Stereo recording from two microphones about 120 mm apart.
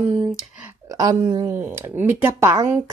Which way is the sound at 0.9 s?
30° right (ahead or behind).